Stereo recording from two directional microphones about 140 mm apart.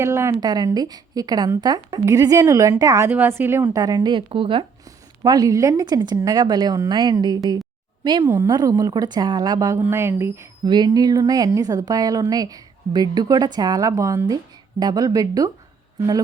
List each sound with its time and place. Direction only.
0.0 s a woman's voice: 20° right (ahead or behind); by 4.6 s 40° right (ahead or behind)
4.9 s a woman's voice: 30° right (ahead or behind)
8.2 s a woman's voice: 20° right (ahead or behind)
10.6 s a woman's voice: 30° right (ahead or behind)